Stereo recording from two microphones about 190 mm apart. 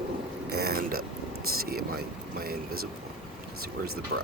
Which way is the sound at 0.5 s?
55° right (ahead or behind).